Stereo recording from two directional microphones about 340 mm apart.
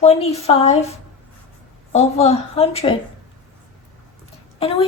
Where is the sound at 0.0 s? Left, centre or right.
Centre.